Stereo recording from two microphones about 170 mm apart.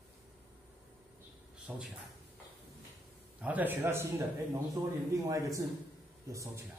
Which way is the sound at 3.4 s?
10° right (ahead or behind).